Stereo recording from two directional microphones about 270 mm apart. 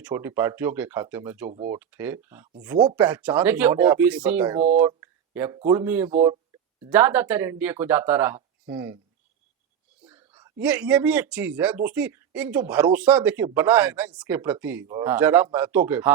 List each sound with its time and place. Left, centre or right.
0.0 s speech: centre
4.8 s a sound: centre
5.5 s speech: centre
10.0 s speech: centre